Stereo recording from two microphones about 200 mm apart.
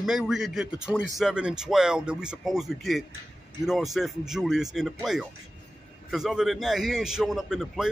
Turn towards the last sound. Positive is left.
turn(degrees=0)  # may be behind; listen again after turning